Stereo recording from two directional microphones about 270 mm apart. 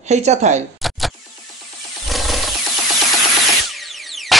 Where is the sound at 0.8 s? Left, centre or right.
Centre.